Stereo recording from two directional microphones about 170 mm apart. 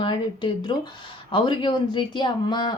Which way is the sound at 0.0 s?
25° left (ahead or behind).